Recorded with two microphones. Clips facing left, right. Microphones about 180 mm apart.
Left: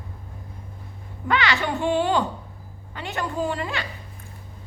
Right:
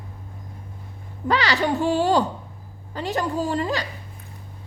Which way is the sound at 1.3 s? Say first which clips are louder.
Right 2 dB; 35° right (ahead or behind).